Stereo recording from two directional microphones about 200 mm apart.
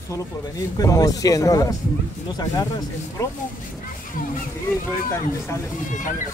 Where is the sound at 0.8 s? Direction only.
20° left (ahead or behind).